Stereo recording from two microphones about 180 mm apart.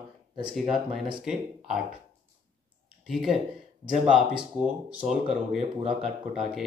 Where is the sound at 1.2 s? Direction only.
5° right (ahead or behind).